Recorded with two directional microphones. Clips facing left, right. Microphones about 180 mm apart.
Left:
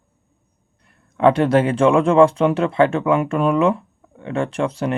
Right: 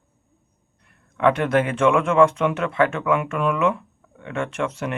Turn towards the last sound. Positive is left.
turn(degrees=35)  # may be behind; listen again after turning